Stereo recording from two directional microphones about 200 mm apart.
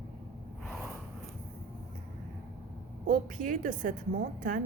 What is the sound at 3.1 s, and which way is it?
Speech, 40° right (ahead or behind).